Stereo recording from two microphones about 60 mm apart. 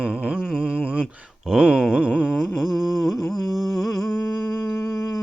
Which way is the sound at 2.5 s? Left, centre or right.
Centre.